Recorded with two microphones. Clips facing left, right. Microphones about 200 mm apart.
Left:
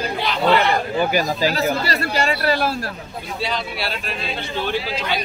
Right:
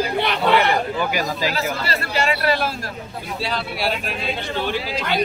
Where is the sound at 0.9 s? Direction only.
35° left (ahead or behind).